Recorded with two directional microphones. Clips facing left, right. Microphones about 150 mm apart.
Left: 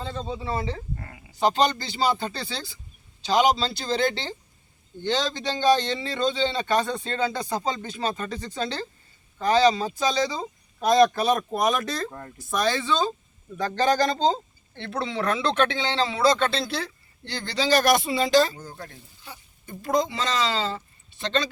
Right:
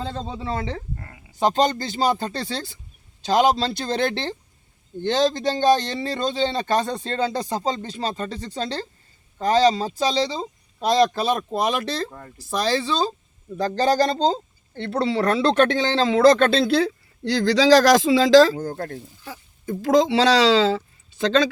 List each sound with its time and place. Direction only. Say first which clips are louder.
0.0 s speech: right 2 dB; 75° right (ahead or behind)
0.9 s a sound: even; 10° left (ahead or behind)
1.4 s speech: right 2 dB; 45° right (ahead or behind)
5.0 s speech: right 6 dB; 50° right (ahead or behind); by 18.6 s 90° right
18.6 s speech: right 11 dB; 55° right (ahead or behind); by 21.5 s 90° right